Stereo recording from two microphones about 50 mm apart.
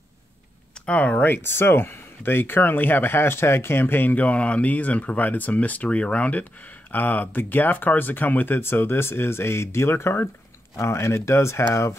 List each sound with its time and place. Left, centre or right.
0.8 s speech: left
1.2 s speech: left